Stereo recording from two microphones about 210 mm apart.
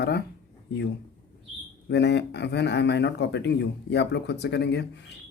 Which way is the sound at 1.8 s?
55° left (ahead or behind).